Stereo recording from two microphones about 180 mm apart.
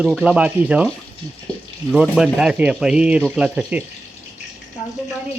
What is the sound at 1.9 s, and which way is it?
Speech, 5° right (ahead or behind).